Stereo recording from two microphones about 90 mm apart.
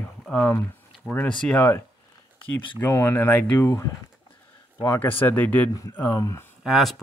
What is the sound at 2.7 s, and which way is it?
Speech, 30° left (ahead or behind).